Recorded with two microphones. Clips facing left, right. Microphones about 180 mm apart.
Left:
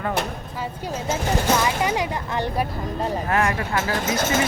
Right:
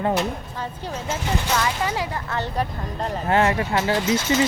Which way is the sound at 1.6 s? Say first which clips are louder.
Left 2 dB; 15° left (ahead or behind).